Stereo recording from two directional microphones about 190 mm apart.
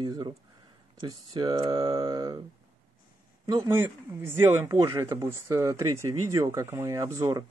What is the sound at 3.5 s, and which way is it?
Speech, 15° right (ahead or behind).